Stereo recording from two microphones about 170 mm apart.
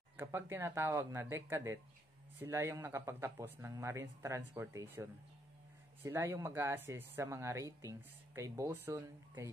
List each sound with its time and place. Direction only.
0.2 s speech: 15° right (ahead or behind)